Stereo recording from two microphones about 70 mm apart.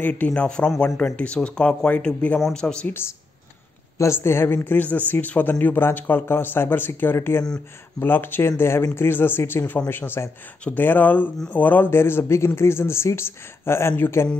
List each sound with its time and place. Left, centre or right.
0.0 s speech: left
0.3 s speech: centre
4.0 s speech: left